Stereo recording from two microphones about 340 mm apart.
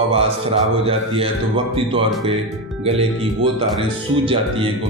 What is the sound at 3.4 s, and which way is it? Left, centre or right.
Speech, centre.